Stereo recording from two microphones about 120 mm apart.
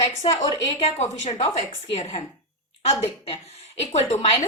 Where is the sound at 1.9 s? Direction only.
60° left (ahead or behind).